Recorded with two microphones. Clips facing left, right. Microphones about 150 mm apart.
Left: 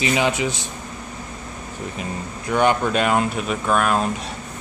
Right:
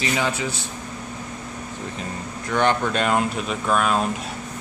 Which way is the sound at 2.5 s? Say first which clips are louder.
Left 2 dB; 10° left (ahead or behind).